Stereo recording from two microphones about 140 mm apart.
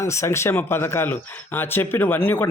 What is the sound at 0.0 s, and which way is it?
Speech, 20° left (ahead or behind).